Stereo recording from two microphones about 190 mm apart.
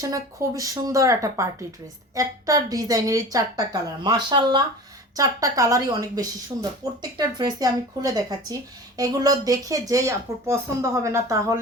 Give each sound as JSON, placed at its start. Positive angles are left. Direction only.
{"t": 0.0, "sound": "a woman's voice", "side_deg": -15}